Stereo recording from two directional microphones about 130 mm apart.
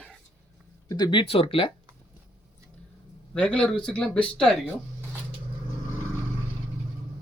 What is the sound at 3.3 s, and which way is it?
Speech, 5° left (ahead or behind).